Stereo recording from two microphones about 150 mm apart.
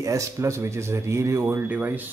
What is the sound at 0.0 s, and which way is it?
Speech, 20° right (ahead or behind).